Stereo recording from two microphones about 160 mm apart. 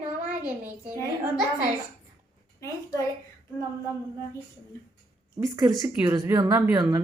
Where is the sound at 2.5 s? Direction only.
20° left (ahead or behind).